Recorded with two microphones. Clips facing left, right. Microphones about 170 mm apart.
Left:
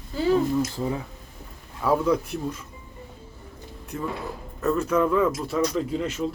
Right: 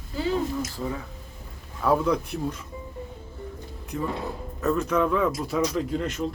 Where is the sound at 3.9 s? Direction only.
Centre (ahead or behind).